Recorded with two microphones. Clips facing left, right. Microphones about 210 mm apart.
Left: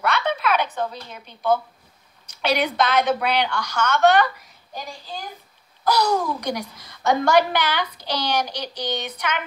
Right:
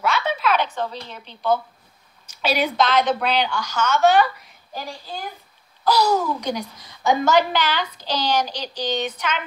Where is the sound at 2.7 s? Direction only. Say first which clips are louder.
Right 1 dB; 60° left (ahead or behind).